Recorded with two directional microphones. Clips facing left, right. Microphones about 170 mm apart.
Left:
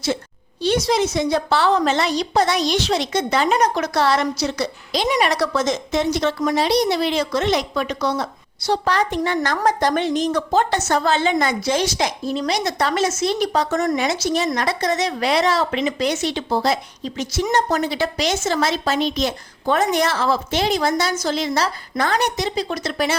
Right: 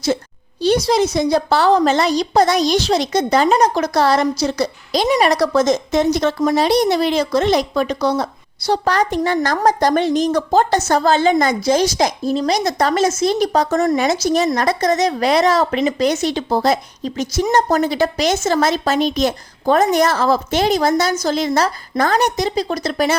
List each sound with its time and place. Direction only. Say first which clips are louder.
0.6 s a woman's voice: right 4 dB; 35° right (ahead or behind)